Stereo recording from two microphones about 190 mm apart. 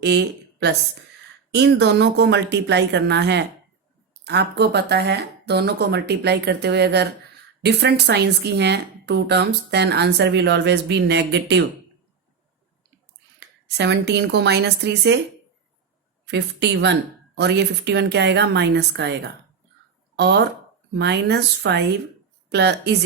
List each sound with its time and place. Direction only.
0.0 s a woman's voice: 60° right (ahead or behind)
13.7 s speech: 65° right (ahead or behind)
16.2 s speech: 65° right (ahead or behind)
20.1 s speech: 60° right (ahead or behind)